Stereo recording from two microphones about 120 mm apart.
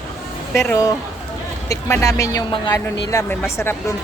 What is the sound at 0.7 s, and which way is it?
A woman's voice, 30° left (ahead or behind).